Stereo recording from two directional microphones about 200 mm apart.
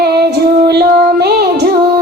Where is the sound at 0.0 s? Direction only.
55° right (ahead or behind).